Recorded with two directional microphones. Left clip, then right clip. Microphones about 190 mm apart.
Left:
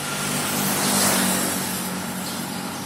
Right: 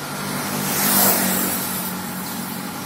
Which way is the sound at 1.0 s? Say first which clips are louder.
Right 1 dB; 55° right (ahead or behind).